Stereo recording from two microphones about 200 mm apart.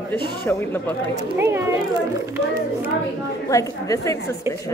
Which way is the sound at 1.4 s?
10° right (ahead or behind).